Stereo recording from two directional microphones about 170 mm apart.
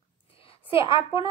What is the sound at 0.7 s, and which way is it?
Speech, 30° left (ahead or behind).